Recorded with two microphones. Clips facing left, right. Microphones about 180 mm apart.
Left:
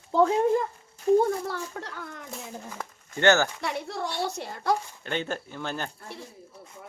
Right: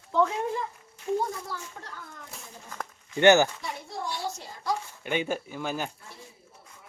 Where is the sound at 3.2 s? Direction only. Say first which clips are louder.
Right 3 dB; 15° right (ahead or behind).